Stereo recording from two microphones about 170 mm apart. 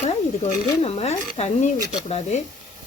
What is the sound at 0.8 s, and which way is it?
Speech, 35° left (ahead or behind).